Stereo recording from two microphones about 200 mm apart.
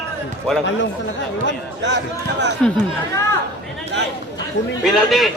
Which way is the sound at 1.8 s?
65° right (ahead or behind).